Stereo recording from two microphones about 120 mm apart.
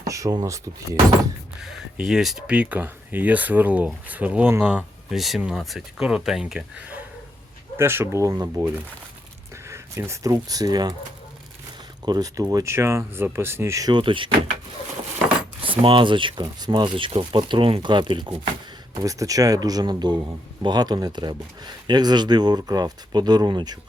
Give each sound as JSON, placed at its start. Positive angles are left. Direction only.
{"t": 0.0, "sound": "speech", "side_deg": -25}
{"t": 1.6, "sound": "speech", "side_deg": -5}
{"t": 12.0, "sound": "speech", "side_deg": -30}
{"t": 13.9, "sound": "speech", "side_deg": -45}
{"t": 15.6, "sound": "speech", "side_deg": -45}
{"t": 19.0, "sound": "speech", "side_deg": -30}